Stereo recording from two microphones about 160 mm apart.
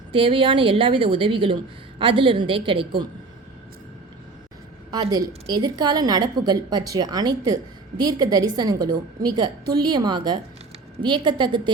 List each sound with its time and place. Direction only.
0.1 s a woman's voice: 35° right (ahead or behind)
4.9 s a woman's voice: 25° right (ahead or behind)